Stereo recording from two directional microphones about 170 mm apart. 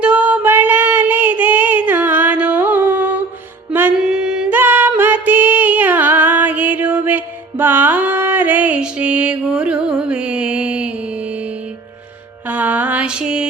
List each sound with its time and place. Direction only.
0.0 s child singing: 10° right (ahead or behind)
3.7 s music: 10° right (ahead or behind)
12.5 s mantra: 10° right (ahead or behind)